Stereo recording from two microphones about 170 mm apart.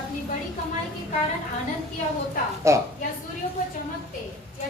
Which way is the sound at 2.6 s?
15° right (ahead or behind).